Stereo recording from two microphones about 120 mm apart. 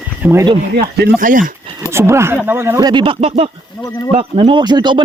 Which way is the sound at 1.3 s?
90° right.